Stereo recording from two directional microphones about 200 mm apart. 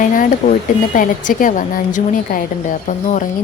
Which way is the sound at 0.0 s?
40° left (ahead or behind).